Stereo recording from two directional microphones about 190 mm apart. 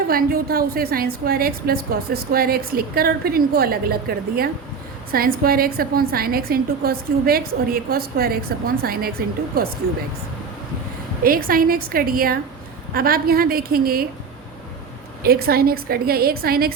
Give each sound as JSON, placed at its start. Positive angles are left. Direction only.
{"t": 0.1, "sound": "a woman's voice", "side_deg": -50}
{"t": 11.2, "sound": "a woman's voice", "side_deg": -50}
{"t": 15.2, "sound": "a woman's voice", "side_deg": -55}